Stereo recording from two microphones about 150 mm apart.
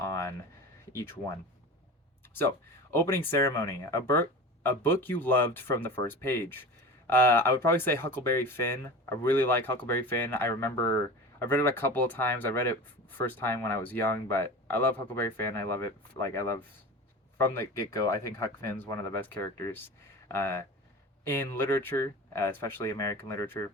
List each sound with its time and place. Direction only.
0.0 s a sound: 20° left (ahead or behind)
2.9 s speech: 15° left (ahead or behind)
17.3 s speech: 15° left (ahead or behind)